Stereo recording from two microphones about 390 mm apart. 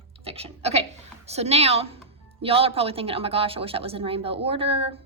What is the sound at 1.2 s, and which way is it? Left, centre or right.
A woman's voice, centre.